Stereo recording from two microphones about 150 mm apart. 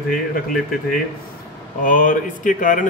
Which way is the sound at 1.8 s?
65° left (ahead or behind).